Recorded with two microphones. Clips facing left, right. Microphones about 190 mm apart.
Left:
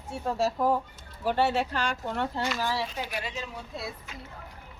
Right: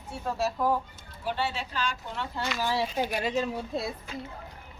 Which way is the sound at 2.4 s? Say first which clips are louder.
Left 1 dB; 10° left (ahead or behind).